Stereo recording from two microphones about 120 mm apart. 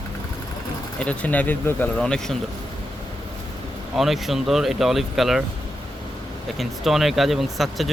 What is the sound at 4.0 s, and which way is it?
Speech, centre (ahead or behind).